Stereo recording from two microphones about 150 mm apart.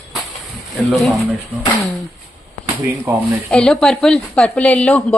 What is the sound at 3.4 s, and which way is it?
Speech, 5° left (ahead or behind).